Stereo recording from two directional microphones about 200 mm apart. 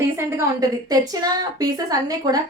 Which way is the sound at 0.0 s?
15° right (ahead or behind).